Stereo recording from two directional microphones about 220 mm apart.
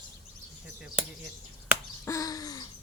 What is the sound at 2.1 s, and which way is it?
Speech, 15° left (ahead or behind).